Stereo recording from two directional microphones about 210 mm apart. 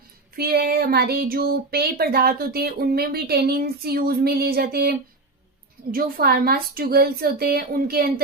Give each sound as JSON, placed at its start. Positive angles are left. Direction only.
{"t": 0.3, "sound": "speech", "side_deg": -50}